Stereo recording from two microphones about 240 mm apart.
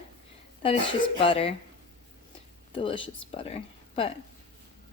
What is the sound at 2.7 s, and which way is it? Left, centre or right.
Speech, left.